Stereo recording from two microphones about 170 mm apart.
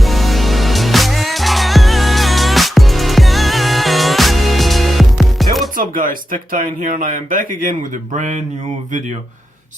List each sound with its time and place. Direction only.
0.0 s music: centre (ahead or behind)
5.7 s speech: 55° right (ahead or behind)